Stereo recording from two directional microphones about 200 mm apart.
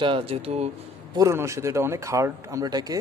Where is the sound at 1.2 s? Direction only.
15° right (ahead or behind).